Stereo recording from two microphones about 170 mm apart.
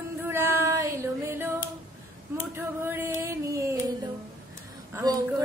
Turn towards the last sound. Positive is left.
turn(degrees=-25)  # may be behind; listen again after turning